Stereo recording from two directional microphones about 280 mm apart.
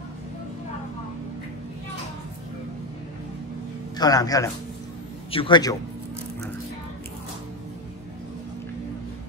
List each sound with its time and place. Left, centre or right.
4.0 s a man's voice: centre